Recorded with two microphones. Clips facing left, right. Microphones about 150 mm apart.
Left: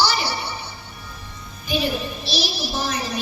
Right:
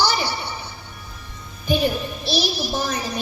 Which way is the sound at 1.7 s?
50° right (ahead or behind).